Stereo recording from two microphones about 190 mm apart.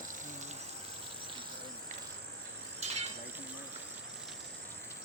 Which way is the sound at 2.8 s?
35° right (ahead or behind).